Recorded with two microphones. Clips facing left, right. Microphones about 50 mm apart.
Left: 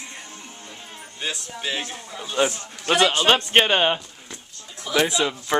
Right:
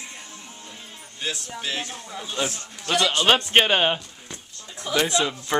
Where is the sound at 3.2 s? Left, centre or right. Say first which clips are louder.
Left 1 dB; centre.